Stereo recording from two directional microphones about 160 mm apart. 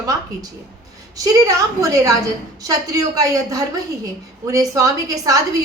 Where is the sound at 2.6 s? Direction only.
20° right (ahead or behind).